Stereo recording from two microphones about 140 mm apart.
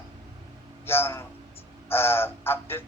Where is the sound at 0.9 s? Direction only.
15° left (ahead or behind).